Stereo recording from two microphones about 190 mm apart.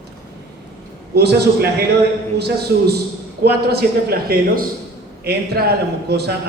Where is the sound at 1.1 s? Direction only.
60° right (ahead or behind).